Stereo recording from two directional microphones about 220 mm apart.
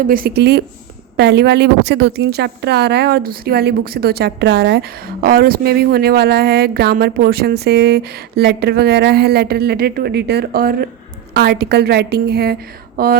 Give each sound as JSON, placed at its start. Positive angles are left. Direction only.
{"t": 0.1, "sound": "a woman's voice", "side_deg": -45}